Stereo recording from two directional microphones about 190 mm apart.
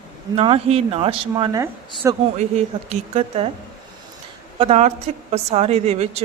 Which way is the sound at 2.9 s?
30° right (ahead or behind).